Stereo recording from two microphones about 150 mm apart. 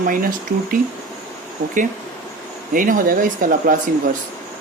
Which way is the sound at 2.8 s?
65° right (ahead or behind).